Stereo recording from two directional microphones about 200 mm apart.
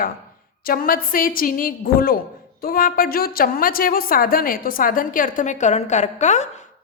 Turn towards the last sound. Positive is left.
turn(degrees=35)  # may be behind; listen again after turning